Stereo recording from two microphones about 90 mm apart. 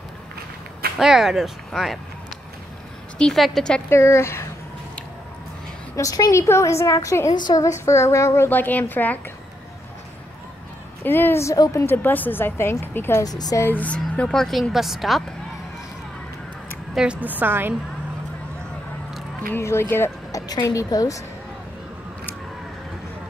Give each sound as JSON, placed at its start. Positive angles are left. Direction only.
{"t": 0.9, "sound": "a woman's voice", "side_deg": -5}
{"t": 3.2, "sound": "a woman's voice", "side_deg": 5}
{"t": 3.9, "sound": "a woman's voice", "side_deg": 30}
{"t": 5.9, "sound": "a woman's voice", "side_deg": 40}
{"t": 8.5, "sound": "a woman's voice", "side_deg": 20}
{"t": 11.1, "sound": "a woman's voice", "side_deg": 25}
{"t": 11.5, "sound": "a woman's voice", "side_deg": 45}
{"t": 11.8, "sound": "a woman's voice", "side_deg": 25}
{"t": 13.2, "sound": "a woman's voice", "side_deg": 45}
{"t": 13.6, "sound": "a woman's voice", "side_deg": 20}
{"t": 16.9, "sound": "a woman's voice", "side_deg": -10}
{"t": 17.4, "sound": "a woman's voice", "side_deg": -25}
{"t": 19.5, "sound": "speech", "side_deg": 30}
{"t": 20.4, "sound": "a woman's voice", "side_deg": 45}